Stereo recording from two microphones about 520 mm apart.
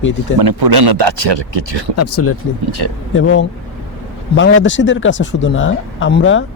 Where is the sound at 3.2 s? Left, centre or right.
Left.